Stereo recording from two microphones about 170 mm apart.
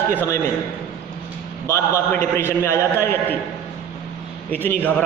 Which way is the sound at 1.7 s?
15° left (ahead or behind).